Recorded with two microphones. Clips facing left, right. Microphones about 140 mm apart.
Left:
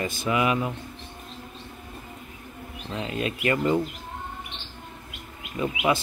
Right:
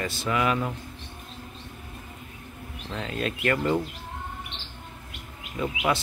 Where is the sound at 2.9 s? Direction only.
10° left (ahead or behind).